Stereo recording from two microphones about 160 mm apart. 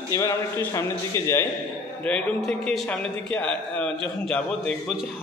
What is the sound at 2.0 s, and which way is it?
A man's voice, 5° left (ahead or behind).